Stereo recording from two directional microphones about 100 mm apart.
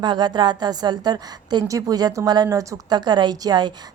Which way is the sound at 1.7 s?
35° right (ahead or behind).